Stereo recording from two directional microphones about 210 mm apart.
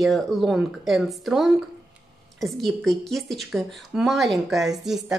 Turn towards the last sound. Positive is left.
turn(degrees=0)  # may be behind; listen again after turning